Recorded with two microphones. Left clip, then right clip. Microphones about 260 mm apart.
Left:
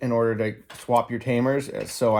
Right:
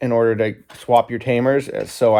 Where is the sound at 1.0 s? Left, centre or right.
Centre.